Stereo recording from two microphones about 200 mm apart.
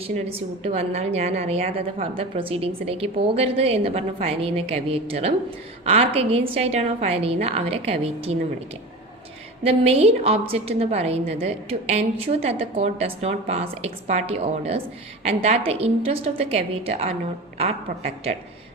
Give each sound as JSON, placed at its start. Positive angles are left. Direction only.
{"t": 0.3, "sound": "a woman's voice", "side_deg": -30}
{"t": 9.6, "sound": "a woman's voice", "side_deg": -30}